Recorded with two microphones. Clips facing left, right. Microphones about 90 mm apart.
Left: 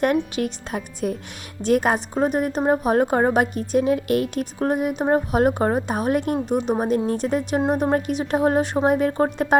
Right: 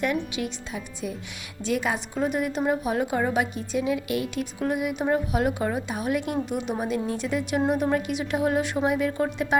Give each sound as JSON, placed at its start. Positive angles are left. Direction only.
{"t": 0.0, "sound": "a woman's voice", "side_deg": 50}